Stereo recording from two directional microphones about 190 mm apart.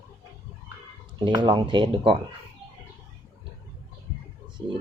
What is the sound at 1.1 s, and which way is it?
Speech, 25° right (ahead or behind).